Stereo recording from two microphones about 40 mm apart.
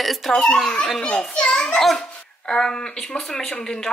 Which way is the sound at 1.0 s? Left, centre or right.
Left.